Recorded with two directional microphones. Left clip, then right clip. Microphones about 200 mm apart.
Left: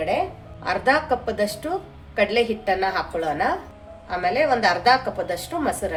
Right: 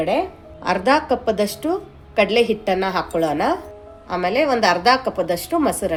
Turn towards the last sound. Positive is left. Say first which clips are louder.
# right 5 dB
turn(degrees=-45)  # may be behind; listen again after turning